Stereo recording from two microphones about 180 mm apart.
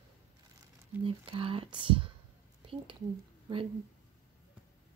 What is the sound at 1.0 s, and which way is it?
Speech, 30° right (ahead or behind).